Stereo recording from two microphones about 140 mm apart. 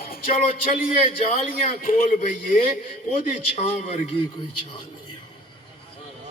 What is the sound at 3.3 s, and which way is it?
Speech, 50° left (ahead or behind).